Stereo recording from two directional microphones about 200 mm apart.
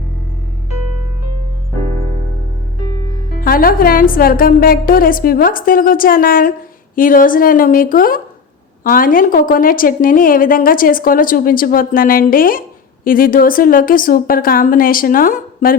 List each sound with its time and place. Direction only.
3.4 s a woman's voice: 45° left (ahead or behind)